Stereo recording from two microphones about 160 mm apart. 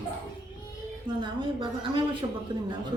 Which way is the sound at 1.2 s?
30° right (ahead or behind).